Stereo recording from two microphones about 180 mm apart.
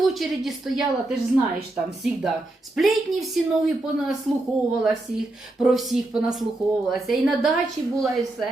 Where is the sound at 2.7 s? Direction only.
Centre (ahead or behind).